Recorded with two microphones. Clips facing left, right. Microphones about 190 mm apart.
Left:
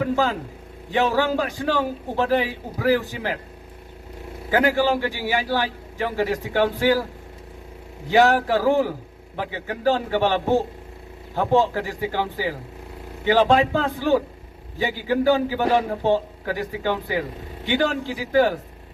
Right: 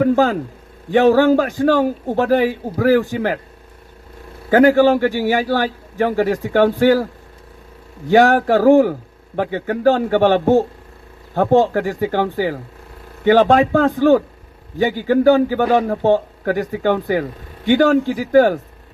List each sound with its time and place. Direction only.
0.0 s a man's voice: 45° right (ahead or behind)
4.4 s a man's voice: 50° right (ahead or behind)